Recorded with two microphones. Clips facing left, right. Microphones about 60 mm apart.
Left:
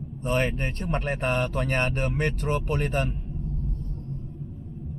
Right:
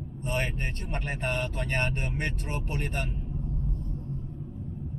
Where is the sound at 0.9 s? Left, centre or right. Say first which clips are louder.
Left 5 dB; left.